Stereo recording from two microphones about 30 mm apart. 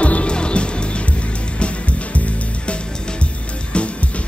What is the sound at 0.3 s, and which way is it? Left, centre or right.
Music, left.